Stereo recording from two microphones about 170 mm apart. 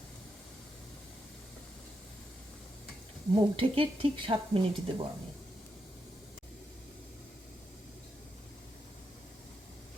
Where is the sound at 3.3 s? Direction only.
30° right (ahead or behind).